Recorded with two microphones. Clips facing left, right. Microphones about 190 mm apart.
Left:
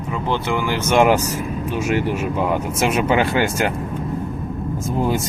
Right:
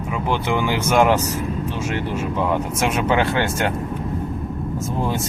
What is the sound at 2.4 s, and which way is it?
Speech, 10° left (ahead or behind).